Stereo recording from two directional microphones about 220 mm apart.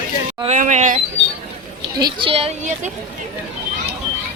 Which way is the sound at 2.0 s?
25° right (ahead or behind).